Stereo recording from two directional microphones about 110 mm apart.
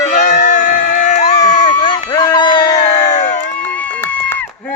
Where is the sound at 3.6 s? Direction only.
15° left (ahead or behind).